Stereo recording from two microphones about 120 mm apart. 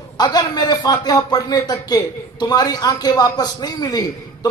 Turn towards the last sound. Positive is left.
turn(degrees=35)  # may be behind; listen again after turning